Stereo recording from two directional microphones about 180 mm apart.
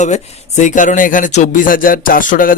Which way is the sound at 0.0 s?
40° left (ahead or behind).